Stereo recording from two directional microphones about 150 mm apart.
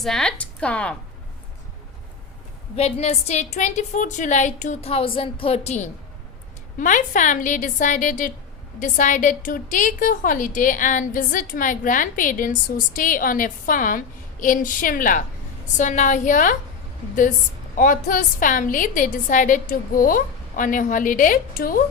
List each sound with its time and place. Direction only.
0.0 s a woman's voice: 5° left (ahead or behind)
2.7 s a woman's voice: 45° left (ahead or behind)
6.7 s a woman's voice: 60° left (ahead or behind)
17.7 s a woman's voice: 65° left (ahead or behind)